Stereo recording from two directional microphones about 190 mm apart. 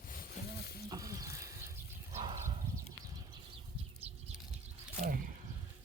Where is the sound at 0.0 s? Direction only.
50° left (ahead or behind).